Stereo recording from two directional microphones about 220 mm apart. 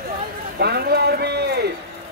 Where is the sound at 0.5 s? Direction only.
45° right (ahead or behind).